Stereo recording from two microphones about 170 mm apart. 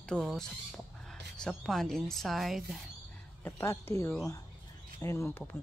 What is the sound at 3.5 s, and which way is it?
A woman's voice, 15° left (ahead or behind).